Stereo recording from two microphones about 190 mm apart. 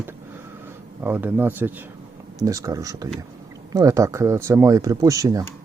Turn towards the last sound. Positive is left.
turn(degrees=-20)  # may be behind; listen again after turning